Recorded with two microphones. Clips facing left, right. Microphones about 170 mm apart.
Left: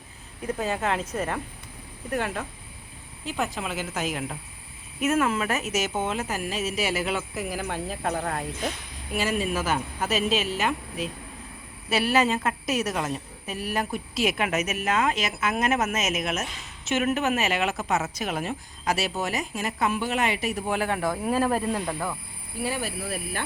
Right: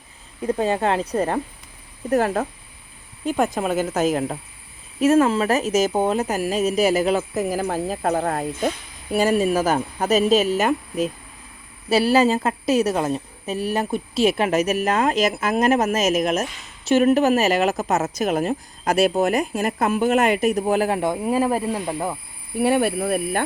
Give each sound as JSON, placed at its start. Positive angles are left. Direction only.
{"t": 0.4, "sound": "a woman's voice", "side_deg": -30}
{"t": 21.0, "sound": "speech", "side_deg": -20}
{"t": 21.3, "sound": "speech", "side_deg": -10}
{"t": 21.9, "sound": "speech", "side_deg": -25}
{"t": 22.5, "sound": "speech", "side_deg": -60}